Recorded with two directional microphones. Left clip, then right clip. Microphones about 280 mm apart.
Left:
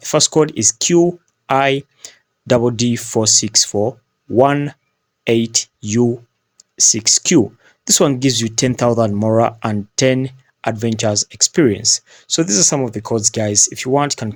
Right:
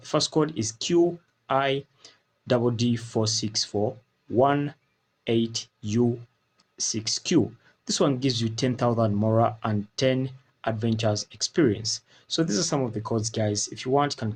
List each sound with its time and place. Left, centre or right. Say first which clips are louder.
0.0 s speech: left 10 dB; left